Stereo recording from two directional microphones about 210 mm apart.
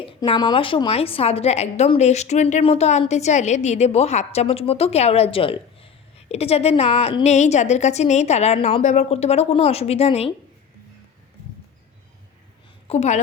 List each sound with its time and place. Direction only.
0.0 s a woman's voice: 20° left (ahead or behind)
12.9 s a woman's voice: 35° left (ahead or behind)